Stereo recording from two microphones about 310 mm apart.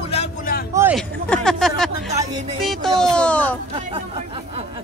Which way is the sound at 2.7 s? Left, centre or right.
Centre.